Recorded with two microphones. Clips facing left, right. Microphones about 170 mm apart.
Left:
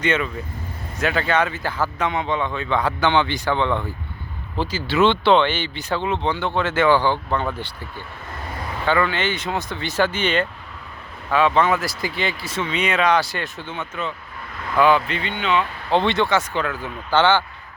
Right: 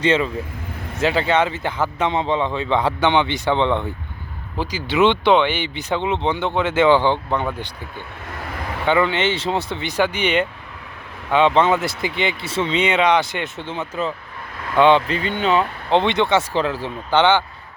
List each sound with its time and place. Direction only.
0.0 s a man's voice: 30° right (ahead or behind)
4.5 s speech: 10° right (ahead or behind)
8.9 s a man's voice: 20° right (ahead or behind); by 15.6 s 40° right (ahead or behind)
15.9 s a man's voice: 20° right (ahead or behind)
17.1 s speech: 20° right (ahead or behind)